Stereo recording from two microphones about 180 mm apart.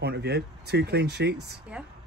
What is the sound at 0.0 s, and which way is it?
Speech, 65° right (ahead or behind).